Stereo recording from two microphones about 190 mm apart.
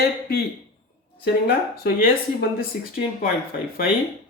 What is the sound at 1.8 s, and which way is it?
Speech, 50° left (ahead or behind).